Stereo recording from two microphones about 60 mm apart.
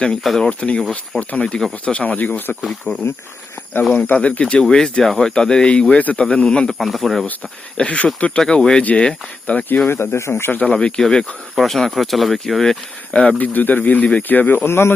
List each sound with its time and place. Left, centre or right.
0.2 s speech: centre
6.7 s speech: centre
7.4 s speech: centre
8.8 s speech: left
9.9 s speech: left
10.7 s speech: centre
13.4 s speech: left
14.6 s speech: left